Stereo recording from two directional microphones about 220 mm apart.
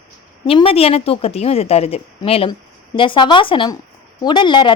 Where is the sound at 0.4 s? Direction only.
25° left (ahead or behind).